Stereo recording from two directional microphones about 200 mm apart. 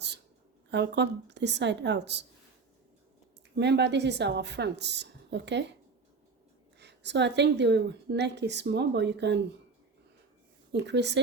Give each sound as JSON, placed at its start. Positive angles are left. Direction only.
{"t": 0.7, "sound": "a woman's voice", "side_deg": -60}
{"t": 3.5, "sound": "a woman's voice", "side_deg": -60}
{"t": 6.7, "sound": "a woman's voice", "side_deg": -60}
{"t": 10.7, "sound": "a woman's voice", "side_deg": -60}